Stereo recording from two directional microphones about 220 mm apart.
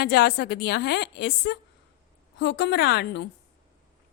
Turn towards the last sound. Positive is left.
turn(degrees=50)  # may be behind; listen again after turning